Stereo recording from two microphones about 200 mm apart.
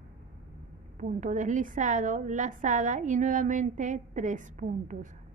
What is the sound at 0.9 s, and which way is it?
A woman's voice, 40° right (ahead or behind).